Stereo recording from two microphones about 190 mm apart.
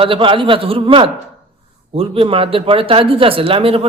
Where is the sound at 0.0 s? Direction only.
25° right (ahead or behind).